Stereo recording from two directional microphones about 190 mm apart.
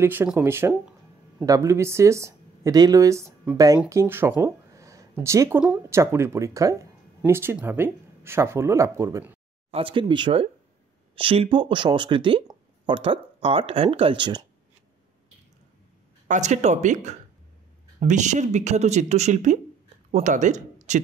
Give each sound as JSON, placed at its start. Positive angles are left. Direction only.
{"t": 0.0, "sound": "speech", "side_deg": -10}
{"t": 9.7, "sound": "speech", "side_deg": -30}
{"t": 16.3, "sound": "speech", "side_deg": -40}